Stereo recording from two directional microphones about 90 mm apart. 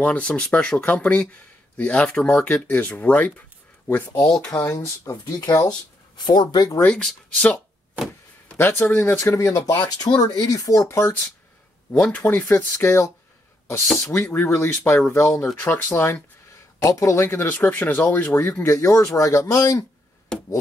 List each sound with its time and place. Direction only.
0.0 s speech: 10° left (ahead or behind)
4.1 s speech: 35° left (ahead or behind)
4.5 s speech: 45° left (ahead or behind)
5.4 s speech: 45° left (ahead or behind)
6.8 s speech: 10° left (ahead or behind)
8.5 s speech: 25° left (ahead or behind)
9.2 s speech: 35° left (ahead or behind)
9.9 s speech: 45° left (ahead or behind)
11.9 s speech: 15° left (ahead or behind)
12.2 s speech: 25° left (ahead or behind)
13.8 s speech: 5° left (ahead or behind)
14.1 s speech: 25° left (ahead or behind)
20.3 s speech: 5° left (ahead or behind)